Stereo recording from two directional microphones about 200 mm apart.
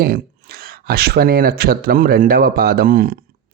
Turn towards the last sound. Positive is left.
turn(degrees=-45)  # may be behind; listen again after turning